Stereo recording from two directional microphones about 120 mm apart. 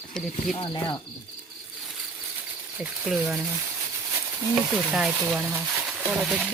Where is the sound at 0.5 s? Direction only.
45° left (ahead or behind).